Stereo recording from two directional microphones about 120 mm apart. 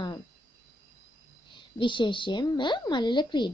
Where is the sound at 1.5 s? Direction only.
45° left (ahead or behind).